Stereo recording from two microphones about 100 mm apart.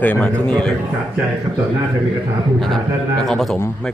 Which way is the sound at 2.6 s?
5° left (ahead or behind).